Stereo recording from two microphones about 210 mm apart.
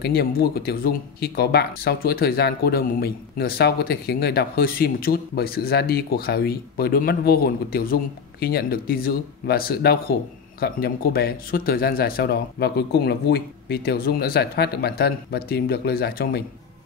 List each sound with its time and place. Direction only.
0.0 s speech: 45° left (ahead or behind)